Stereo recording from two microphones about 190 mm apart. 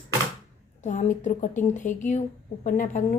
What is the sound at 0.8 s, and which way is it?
A woman's voice, 40° left (ahead or behind).